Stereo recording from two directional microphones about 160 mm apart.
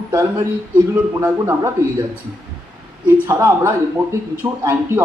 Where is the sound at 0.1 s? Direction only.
20° right (ahead or behind).